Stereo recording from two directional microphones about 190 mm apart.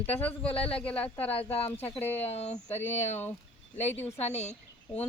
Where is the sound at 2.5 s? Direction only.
10° left (ahead or behind).